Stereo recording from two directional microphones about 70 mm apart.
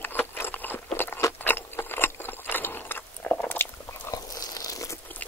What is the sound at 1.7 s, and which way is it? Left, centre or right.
Biting, left.